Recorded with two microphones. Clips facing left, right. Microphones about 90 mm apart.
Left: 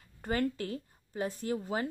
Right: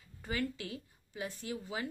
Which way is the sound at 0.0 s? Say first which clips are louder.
Left 5 dB; 45° left (ahead or behind).